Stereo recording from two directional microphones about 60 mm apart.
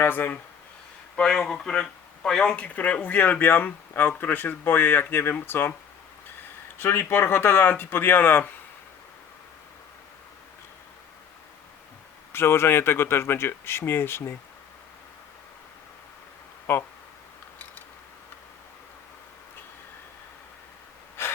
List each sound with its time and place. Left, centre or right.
0.0 s speech: left
1.1 s speech: centre; by 5.7 s left
6.7 s speech: left
12.3 s speech: left
16.7 s speech: left